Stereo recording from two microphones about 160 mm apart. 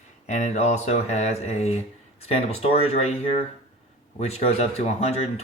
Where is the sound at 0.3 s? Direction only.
45° left (ahead or behind).